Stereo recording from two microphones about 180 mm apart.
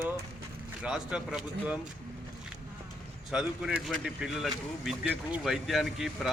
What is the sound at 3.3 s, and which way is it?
Speech, 5° right (ahead or behind).